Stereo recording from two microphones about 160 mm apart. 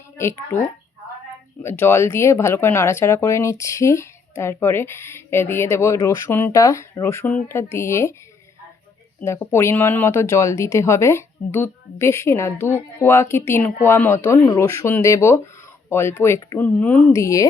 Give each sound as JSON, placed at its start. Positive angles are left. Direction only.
{"t": 0.2, "sound": "speech", "side_deg": 15}
{"t": 1.6, "sound": "speech", "side_deg": 15}
{"t": 9.2, "sound": "speech", "side_deg": 15}